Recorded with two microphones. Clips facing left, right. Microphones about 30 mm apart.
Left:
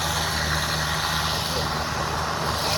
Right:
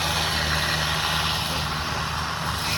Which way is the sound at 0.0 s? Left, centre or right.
Right.